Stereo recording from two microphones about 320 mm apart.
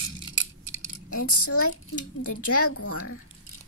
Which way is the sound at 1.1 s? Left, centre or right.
Left.